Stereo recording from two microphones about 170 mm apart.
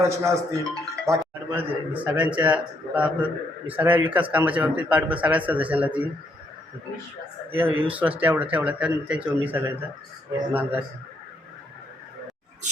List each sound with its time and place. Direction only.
0.0 s a man's voice: 15° right (ahead or behind)
2.0 s a man's voice: 10° right (ahead or behind)
7.5 s a man's voice: 10° right (ahead or behind)